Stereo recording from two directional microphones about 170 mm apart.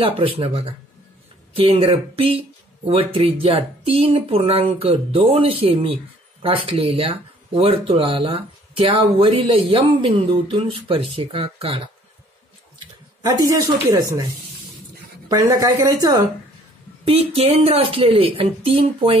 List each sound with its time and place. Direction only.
0.0 s speech: 35° right (ahead or behind)
15.2 s a woman's voice: 20° right (ahead or behind)
17.0 s speech: 35° right (ahead or behind)